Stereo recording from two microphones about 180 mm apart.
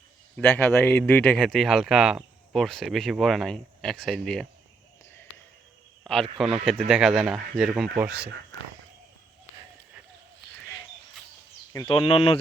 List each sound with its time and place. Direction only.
0.3 s a man's voice: 10° left (ahead or behind)
6.3 s a man's voice: centre (ahead or behind)
11.9 s speech: 30° left (ahead or behind)